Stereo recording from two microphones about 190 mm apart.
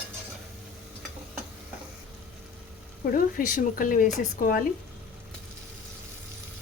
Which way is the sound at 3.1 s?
45° left (ahead or behind).